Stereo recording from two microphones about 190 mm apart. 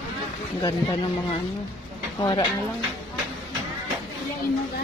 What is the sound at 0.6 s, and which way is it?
Speech, 20° left (ahead or behind).